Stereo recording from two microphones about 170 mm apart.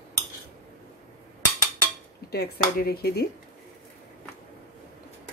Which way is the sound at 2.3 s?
70° left (ahead or behind).